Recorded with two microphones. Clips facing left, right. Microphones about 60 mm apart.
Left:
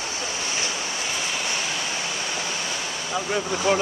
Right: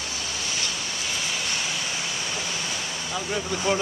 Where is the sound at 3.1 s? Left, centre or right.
Left.